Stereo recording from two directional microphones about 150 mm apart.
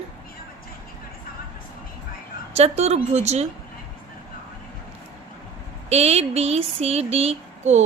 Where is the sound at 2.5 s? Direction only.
45° right (ahead or behind).